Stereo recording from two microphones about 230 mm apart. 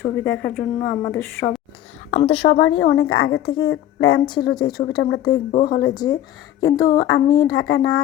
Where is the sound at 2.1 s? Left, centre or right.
Left.